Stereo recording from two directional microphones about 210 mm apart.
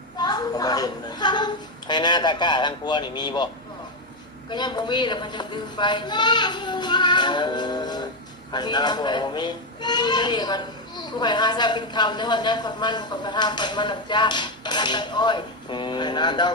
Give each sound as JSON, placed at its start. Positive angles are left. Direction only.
{"t": 0.2, "sound": "a child's voice", "side_deg": 20}